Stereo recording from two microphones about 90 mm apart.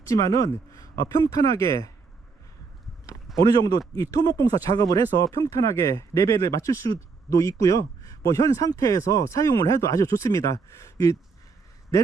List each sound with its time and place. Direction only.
0.1 s speech: 35° left (ahead or behind)
3.3 s speech: 40° left (ahead or behind)